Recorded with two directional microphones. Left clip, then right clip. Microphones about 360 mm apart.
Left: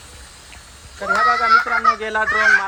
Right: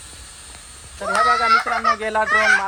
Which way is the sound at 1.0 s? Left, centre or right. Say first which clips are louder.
Left 1 dB; right.